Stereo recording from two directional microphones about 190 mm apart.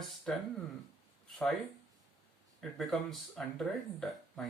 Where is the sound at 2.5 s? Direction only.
Centre (ahead or behind).